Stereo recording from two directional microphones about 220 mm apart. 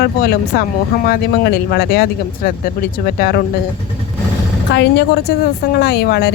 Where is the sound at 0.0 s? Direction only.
45° left (ahead or behind).